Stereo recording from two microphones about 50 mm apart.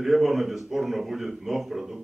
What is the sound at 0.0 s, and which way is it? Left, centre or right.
Speech, centre.